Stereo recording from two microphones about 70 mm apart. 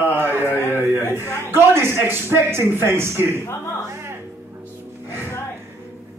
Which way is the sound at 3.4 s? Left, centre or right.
Left.